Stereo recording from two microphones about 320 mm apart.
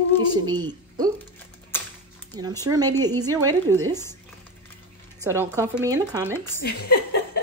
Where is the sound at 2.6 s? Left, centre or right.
Centre.